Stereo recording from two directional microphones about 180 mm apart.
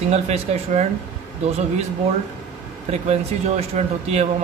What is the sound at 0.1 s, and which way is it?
Speech, 35° right (ahead or behind).